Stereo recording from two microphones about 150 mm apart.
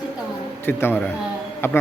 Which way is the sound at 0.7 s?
15° left (ahead or behind).